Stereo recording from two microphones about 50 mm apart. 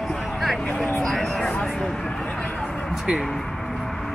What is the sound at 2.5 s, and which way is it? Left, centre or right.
Music, centre.